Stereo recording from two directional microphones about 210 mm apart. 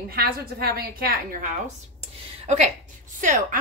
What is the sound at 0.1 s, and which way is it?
A woman's voice, 45° right (ahead or behind).